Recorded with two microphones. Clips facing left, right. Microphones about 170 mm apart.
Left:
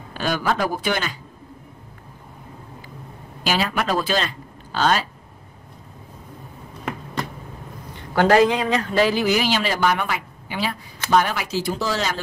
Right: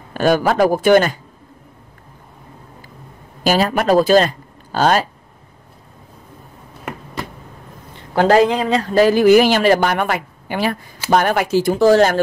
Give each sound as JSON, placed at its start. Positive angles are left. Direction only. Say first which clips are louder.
{"t": 0.1, "sound": "speech", "louder": "right 8 dB", "side_deg": -50}
{"t": 3.4, "sound": "speech", "louder": "right 7 dB", "side_deg": -45}
{"t": 6.8, "sound": "a sound", "louder": "even", "side_deg": -5}
{"t": 8.1, "sound": "speech", "louder": "right 3 dB", "side_deg": -30}